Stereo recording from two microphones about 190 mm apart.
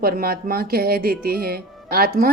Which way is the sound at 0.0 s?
50° right (ahead or behind).